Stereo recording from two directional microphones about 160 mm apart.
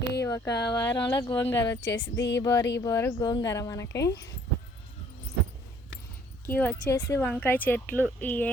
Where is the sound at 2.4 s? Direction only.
20° left (ahead or behind).